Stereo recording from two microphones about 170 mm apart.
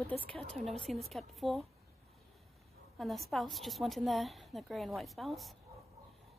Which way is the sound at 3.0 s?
Centre (ahead or behind).